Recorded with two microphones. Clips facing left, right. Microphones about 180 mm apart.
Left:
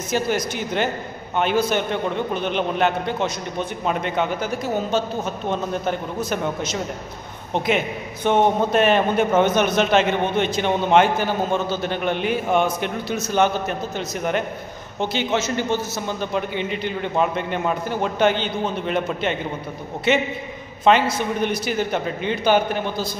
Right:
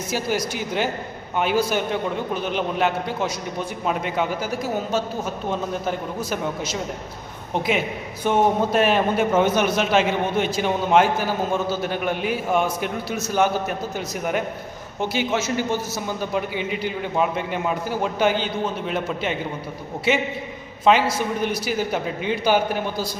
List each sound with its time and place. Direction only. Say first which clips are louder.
1.4 s a man's voice: left 1 dB; 10° right (ahead or behind)